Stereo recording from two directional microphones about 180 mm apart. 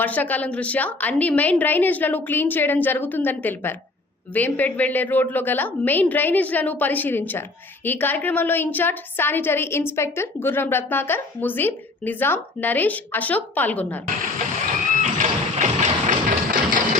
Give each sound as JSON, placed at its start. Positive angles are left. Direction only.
{"t": 0.0, "sound": "a woman's voice", "side_deg": 10}
{"t": 15.0, "sound": "vehicle", "side_deg": -40}